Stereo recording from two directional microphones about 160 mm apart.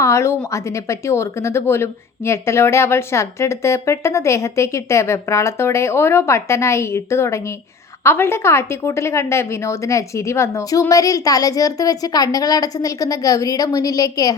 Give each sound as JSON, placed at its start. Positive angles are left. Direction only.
{"t": 0.0, "sound": "a woman's voice", "side_deg": 15}